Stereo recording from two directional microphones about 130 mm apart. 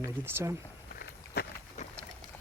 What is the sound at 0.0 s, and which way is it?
Speech, 20° right (ahead or behind).